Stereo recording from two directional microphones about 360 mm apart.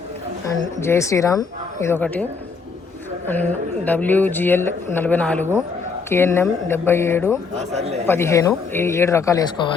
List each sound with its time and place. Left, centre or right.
0.5 s speech: centre
3.2 s speech: centre
7.6 s a man's voice: centre
8.0 s speech: centre